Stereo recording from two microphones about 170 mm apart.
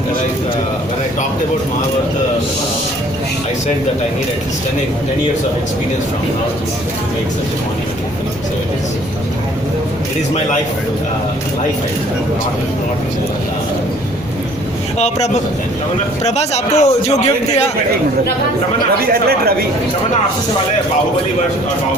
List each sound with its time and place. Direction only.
14.9 s a man's voice: 40° left (ahead or behind)
19.0 s speech: 65° right (ahead or behind)